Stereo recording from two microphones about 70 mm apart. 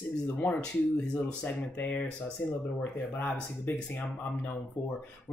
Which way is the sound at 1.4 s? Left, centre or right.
Left.